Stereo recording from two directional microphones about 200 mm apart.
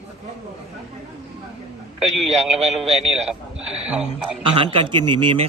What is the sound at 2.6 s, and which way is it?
Speech, 30° right (ahead or behind).